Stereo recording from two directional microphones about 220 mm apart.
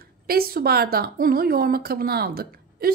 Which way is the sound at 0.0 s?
45° right (ahead or behind).